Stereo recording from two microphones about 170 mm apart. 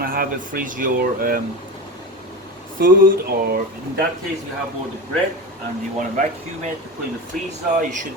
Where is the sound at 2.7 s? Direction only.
60° right (ahead or behind).